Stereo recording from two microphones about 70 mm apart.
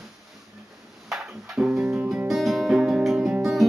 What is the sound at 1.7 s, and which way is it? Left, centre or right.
Music, centre.